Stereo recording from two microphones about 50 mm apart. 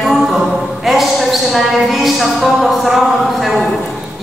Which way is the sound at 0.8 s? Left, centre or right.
Centre.